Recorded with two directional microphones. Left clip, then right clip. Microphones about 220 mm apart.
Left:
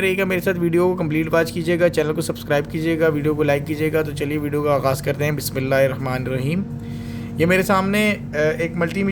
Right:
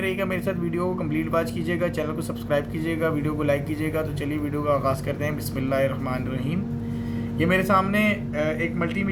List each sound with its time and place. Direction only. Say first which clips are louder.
0.0 s speech: left 6 dB; 50° left (ahead or behind)